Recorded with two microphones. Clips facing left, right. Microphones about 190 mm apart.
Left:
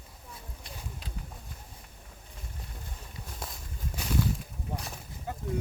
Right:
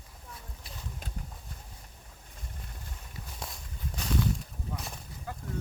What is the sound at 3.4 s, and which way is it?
Walk, centre (ahead or behind).